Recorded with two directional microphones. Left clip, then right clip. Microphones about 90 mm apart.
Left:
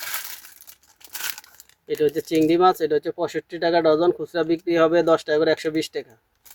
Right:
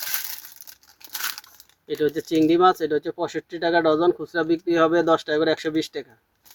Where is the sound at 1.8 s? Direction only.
5° left (ahead or behind).